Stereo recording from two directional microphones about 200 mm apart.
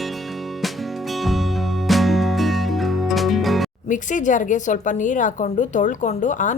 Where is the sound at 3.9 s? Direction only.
40° left (ahead or behind).